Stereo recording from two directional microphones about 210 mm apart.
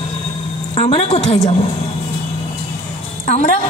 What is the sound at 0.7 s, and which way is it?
Speech, 30° left (ahead or behind).